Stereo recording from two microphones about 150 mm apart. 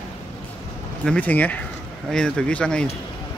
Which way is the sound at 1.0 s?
10° left (ahead or behind).